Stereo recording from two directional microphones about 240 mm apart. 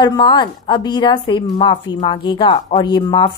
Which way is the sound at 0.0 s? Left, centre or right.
Centre.